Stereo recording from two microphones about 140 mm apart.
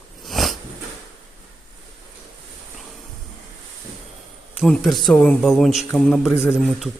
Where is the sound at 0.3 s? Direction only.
Centre (ahead or behind).